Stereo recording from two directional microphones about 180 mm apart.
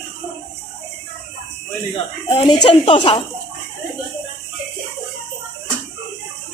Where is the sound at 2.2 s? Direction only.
30° left (ahead or behind).